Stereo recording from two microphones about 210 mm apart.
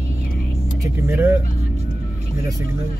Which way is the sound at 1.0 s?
10° right (ahead or behind).